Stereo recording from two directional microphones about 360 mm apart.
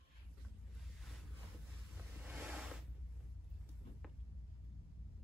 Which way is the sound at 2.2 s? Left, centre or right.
Centre.